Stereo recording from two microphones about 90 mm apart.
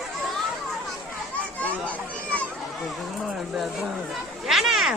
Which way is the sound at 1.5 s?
15° left (ahead or behind).